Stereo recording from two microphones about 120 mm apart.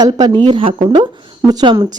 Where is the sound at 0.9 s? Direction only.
35° right (ahead or behind).